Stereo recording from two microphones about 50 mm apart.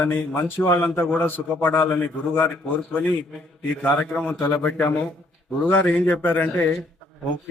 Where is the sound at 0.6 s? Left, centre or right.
Left.